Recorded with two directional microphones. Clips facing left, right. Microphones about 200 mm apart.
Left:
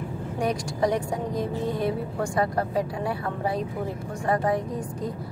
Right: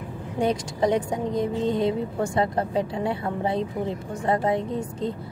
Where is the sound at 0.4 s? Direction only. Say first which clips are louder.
Right 2 dB; 25° right (ahead or behind).